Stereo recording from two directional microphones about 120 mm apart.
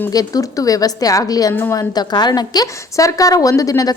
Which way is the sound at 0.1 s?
30° left (ahead or behind).